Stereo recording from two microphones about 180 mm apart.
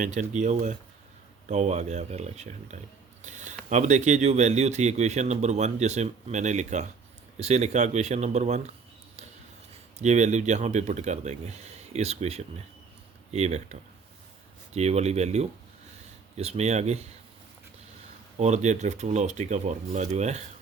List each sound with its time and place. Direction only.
0.0 s speech: 45° right (ahead or behind)
10.0 s speech: 40° right (ahead or behind)
18.3 s speech: 40° right (ahead or behind)